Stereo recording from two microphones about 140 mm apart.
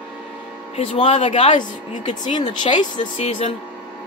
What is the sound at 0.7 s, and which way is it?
Speech, 50° left (ahead or behind).